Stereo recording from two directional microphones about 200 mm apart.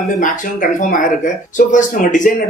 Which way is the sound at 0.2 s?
40° left (ahead or behind).